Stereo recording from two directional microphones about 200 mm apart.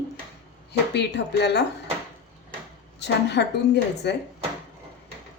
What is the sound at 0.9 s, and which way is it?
Speech, 55° left (ahead or behind).